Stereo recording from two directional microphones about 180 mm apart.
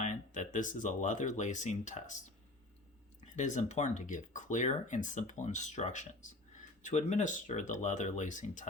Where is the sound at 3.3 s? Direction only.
45° left (ahead or behind).